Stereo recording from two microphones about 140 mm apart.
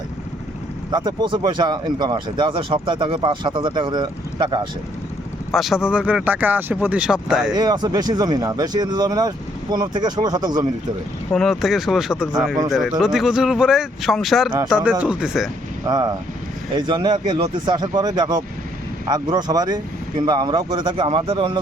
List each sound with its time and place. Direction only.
0.9 s speech: 30° right (ahead or behind)
5.5 s speech: centre (ahead or behind)
7.5 s speech: 30° right (ahead or behind)
11.3 s speech: centre (ahead or behind)
15.9 s speech: 30° right (ahead or behind)